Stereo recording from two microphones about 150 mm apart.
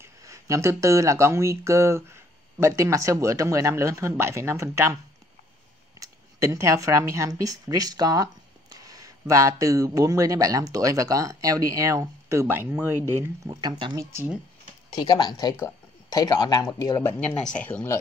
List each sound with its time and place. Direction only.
0.0 s speech: 20° right (ahead or behind)
5.9 s speech: 20° right (ahead or behind)
13.5 s speech: 30° right (ahead or behind)
15.0 s speech: 25° left (ahead or behind)
17.0 s speech: 10° left (ahead or behind)